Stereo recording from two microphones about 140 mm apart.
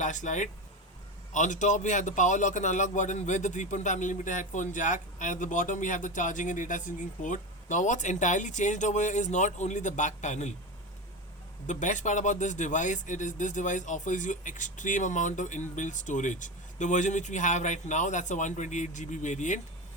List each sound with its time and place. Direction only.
0.0 s a man's voice: 60° left (ahead or behind)
11.6 s a man's voice: 65° left (ahead or behind)